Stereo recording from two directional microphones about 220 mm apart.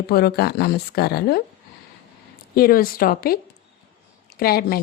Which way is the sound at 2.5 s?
40° left (ahead or behind).